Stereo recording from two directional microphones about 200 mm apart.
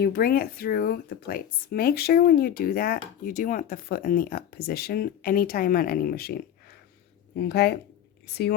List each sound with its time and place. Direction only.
0.0 s speech: 50° left (ahead or behind)